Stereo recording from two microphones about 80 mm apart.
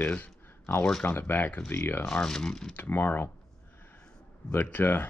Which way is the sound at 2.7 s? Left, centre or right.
Left.